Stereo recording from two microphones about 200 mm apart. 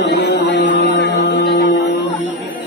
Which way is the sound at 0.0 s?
60° left (ahead or behind).